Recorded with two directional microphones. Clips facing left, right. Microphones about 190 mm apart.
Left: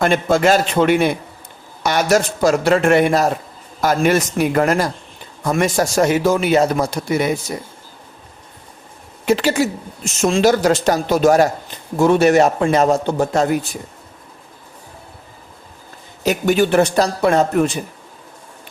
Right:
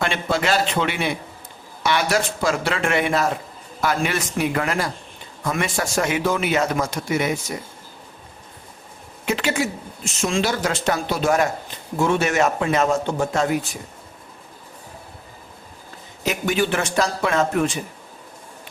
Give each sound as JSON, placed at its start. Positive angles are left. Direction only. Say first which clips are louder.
{"t": 0.0, "sound": "speech", "louder": "left 8 dB", "side_deg": 45}
{"t": 9.2, "sound": "speech", "louder": "left 6 dB", "side_deg": 35}
{"t": 16.2, "sound": "speech", "louder": "left 6 dB", "side_deg": 40}